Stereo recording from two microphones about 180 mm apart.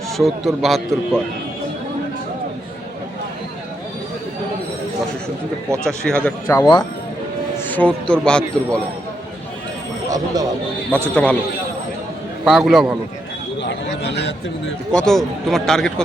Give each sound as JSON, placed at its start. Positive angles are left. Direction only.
{"t": 0.2, "sound": "speech", "side_deg": 0}
{"t": 5.8, "sound": "speech", "side_deg": 5}
{"t": 6.5, "sound": "a man's voice", "side_deg": 20}
{"t": 7.7, "sound": "speech", "side_deg": 10}
{"t": 10.1, "sound": "speech", "side_deg": -20}
{"t": 11.1, "sound": "a man's voice", "side_deg": 5}
{"t": 12.5, "sound": "speech", "side_deg": 0}
{"t": 13.6, "sound": "a sound", "side_deg": 70}
{"t": 14.9, "sound": "speech", "side_deg": 0}